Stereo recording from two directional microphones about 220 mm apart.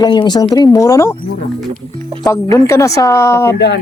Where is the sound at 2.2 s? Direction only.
15° left (ahead or behind).